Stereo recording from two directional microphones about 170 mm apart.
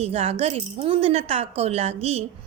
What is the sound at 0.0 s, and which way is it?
Speech, 35° right (ahead or behind).